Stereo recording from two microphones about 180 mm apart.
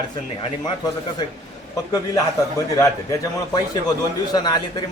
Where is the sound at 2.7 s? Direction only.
20° left (ahead or behind).